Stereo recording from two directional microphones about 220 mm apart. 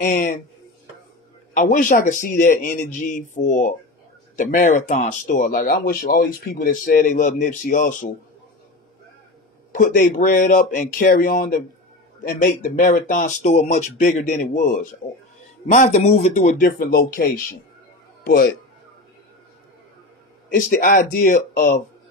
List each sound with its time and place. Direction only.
0.0 s speech: 40° left (ahead or behind)
1.5 s speech: 40° left (ahead or behind)
9.8 s speech: 40° left (ahead or behind)
20.5 s speech: 40° left (ahead or behind)